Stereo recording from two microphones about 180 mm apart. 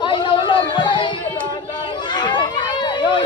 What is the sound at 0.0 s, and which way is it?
Chatter, 25° left (ahead or behind).